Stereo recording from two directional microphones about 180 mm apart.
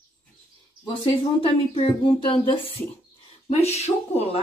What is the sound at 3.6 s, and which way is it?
Speech, 35° left (ahead or behind).